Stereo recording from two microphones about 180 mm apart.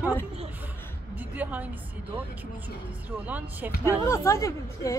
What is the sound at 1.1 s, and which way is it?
Speech, 10° right (ahead or behind).